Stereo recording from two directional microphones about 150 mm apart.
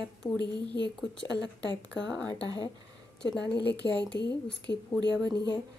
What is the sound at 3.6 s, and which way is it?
Speech, 90° left.